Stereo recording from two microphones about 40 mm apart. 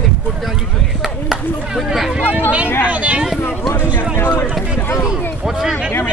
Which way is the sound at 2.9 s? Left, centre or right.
Right.